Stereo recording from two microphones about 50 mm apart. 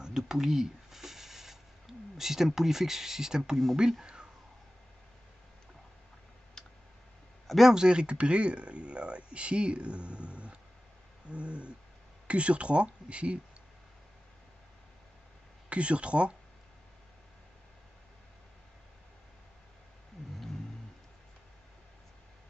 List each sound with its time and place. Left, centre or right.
0.0 s a sound: centre
6.6 s clicking: centre
7.4 s speech: centre
7.7 s speech: centre
15.7 s speech: right